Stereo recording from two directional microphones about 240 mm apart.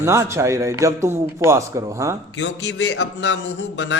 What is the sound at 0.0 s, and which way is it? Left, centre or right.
A man's voice, centre.